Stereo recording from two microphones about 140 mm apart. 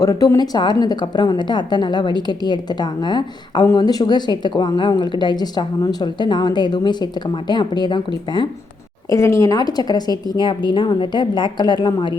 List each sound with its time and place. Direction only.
0.0 s a woman's voice: 25° left (ahead or behind)
9.0 s a woman's voice: 20° left (ahead or behind)